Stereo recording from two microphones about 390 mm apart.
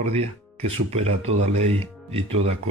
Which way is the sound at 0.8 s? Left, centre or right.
Centre.